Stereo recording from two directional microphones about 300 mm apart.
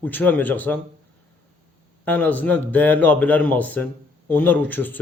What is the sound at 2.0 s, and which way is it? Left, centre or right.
Speech, centre.